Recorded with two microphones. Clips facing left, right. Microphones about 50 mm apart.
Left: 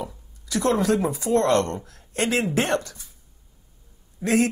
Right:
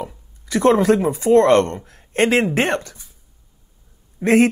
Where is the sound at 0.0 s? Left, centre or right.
Right.